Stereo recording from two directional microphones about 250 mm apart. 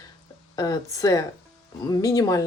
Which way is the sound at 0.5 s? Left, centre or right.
Centre.